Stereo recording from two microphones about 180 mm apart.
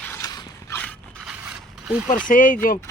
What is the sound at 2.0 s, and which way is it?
Speech, 50° left (ahead or behind).